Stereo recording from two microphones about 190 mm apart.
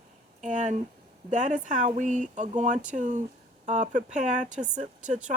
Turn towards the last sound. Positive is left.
turn(degrees=-40)  # may be behind; listen again after turning